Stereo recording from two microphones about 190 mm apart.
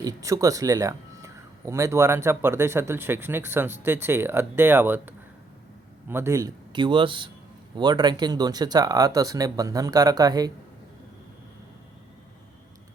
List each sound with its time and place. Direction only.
0.0 s a man's voice: 20° right (ahead or behind)